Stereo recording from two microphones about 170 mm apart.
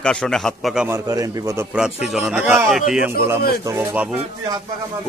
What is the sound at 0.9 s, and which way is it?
Speech, 20° right (ahead or behind).